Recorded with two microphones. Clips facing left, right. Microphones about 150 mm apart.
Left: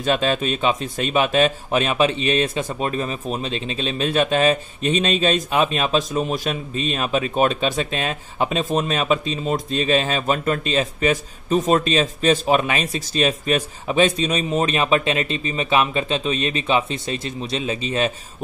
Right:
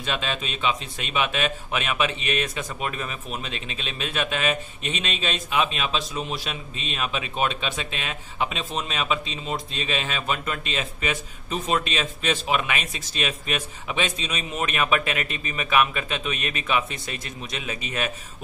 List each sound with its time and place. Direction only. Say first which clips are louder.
0.0 s a man's voice: left 9 dB; 40° left (ahead or behind)